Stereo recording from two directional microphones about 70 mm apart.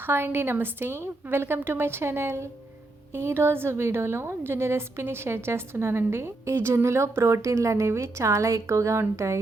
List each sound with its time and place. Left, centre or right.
0.0 s a woman's voice: right